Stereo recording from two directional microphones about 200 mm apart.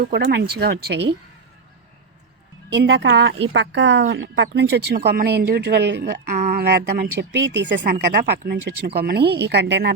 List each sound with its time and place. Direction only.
0.0 s speech: 55° right (ahead or behind)
2.8 s speech: 60° right (ahead or behind)
6.3 s speech: 45° right (ahead or behind)